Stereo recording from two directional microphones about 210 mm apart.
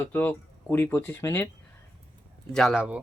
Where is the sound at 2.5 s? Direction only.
Centre (ahead or behind).